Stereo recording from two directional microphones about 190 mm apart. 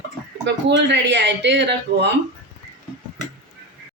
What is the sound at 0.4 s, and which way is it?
Speech, 65° right (ahead or behind).